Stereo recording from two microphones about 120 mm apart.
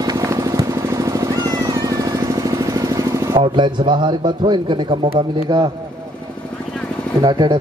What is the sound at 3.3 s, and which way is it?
Speech, 40° right (ahead or behind).